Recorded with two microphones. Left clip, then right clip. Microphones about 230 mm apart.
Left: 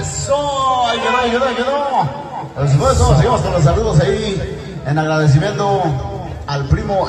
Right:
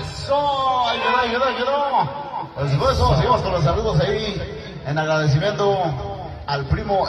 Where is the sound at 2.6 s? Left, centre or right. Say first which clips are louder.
Left 4 dB; right.